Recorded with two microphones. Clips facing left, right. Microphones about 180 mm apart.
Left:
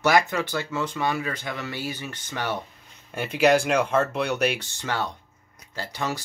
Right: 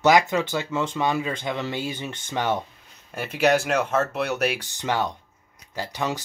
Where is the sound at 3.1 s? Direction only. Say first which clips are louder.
Left 1 dB; centre (ahead or behind).